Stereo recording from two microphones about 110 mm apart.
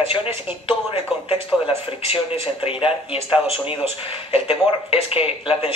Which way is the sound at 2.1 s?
55° left (ahead or behind).